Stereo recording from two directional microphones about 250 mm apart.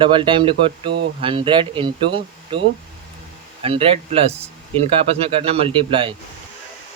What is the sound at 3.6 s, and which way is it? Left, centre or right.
Speech, right.